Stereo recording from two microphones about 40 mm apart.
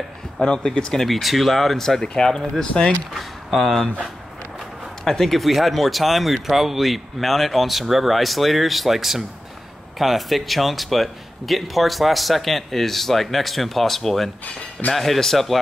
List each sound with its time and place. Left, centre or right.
0.4 s speech: centre
1.0 s speech: centre
3.2 s speech: centre
5.0 s speech: centre